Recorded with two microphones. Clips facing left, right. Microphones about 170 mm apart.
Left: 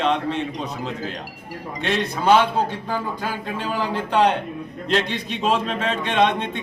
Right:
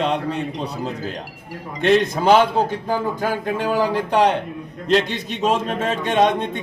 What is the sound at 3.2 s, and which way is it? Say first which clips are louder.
Speech: right 5 dB; 45° right (ahead or behind).